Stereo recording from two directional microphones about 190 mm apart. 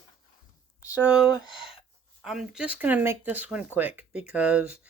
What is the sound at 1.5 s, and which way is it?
Speech, 30° left (ahead or behind).